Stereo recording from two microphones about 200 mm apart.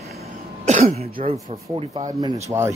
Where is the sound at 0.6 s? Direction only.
35° right (ahead or behind).